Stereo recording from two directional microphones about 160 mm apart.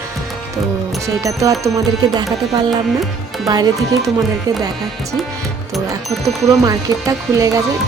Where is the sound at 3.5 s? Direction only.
25° right (ahead or behind).